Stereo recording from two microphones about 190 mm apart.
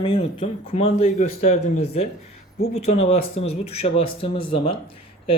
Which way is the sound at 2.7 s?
35° left (ahead or behind).